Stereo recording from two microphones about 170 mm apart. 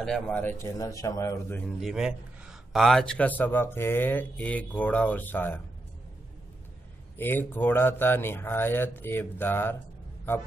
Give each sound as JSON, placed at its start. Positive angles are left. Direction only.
{"t": 0.0, "sound": "speech", "side_deg": 5}
{"t": 1.8, "sound": "speech", "side_deg": 0}
{"t": 7.2, "sound": "speech", "side_deg": 15}